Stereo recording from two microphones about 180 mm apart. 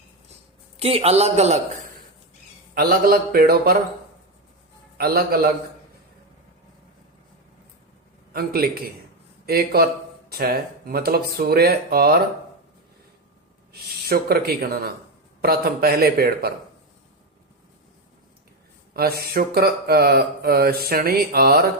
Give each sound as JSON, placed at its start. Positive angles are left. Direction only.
{"t": 0.8, "sound": "a man's voice", "side_deg": -35}
{"t": 2.7, "sound": "mantra", "side_deg": -55}
{"t": 4.9, "sound": "mantra", "side_deg": -55}
{"t": 8.3, "sound": "mantra", "side_deg": -60}
{"t": 13.7, "sound": "mantra", "side_deg": -60}
{"t": 18.9, "sound": "mantra", "side_deg": -60}